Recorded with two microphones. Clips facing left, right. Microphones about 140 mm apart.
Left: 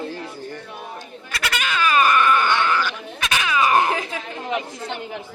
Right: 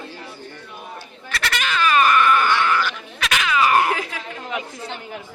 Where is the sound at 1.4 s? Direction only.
10° left (ahead or behind).